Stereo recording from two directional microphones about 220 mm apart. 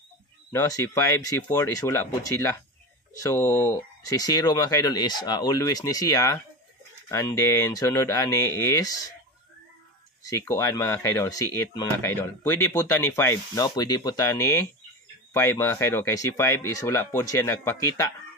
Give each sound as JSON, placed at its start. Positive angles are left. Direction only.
{"t": 0.5, "sound": "speech", "side_deg": 15}
{"t": 10.2, "sound": "speech", "side_deg": 15}